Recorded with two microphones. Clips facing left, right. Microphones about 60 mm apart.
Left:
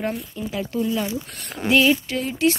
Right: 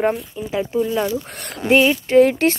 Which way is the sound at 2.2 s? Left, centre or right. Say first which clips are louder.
Right 5 dB; right.